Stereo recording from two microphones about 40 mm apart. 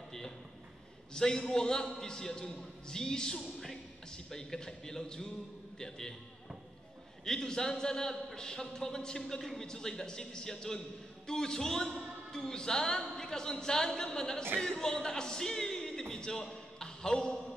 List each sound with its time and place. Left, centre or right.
1.1 s a man's voice: centre
7.2 s a man's voice: centre